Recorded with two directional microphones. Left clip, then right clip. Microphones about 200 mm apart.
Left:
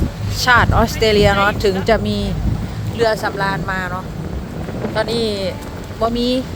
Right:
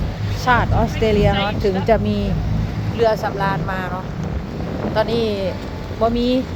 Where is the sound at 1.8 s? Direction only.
10° left (ahead or behind).